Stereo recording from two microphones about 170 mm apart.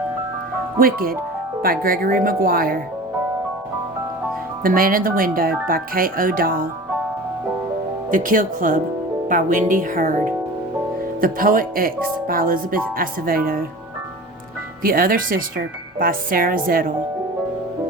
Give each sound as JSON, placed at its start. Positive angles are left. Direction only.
{"t": 0.8, "sound": "speech", "side_deg": -60}
{"t": 4.6, "sound": "speech", "side_deg": -55}
{"t": 8.1, "sound": "speech", "side_deg": -50}
{"t": 14.8, "sound": "speech", "side_deg": -55}